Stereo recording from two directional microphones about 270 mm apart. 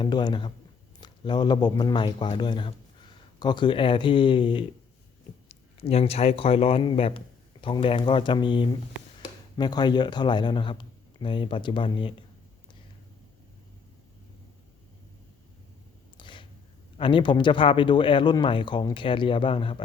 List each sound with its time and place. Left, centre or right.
0.0 s speech: centre
16.1 s a sound: centre
17.0 s speech: centre